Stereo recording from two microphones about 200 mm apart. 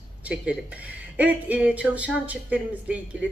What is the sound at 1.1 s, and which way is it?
A woman's voice, 10° right (ahead or behind).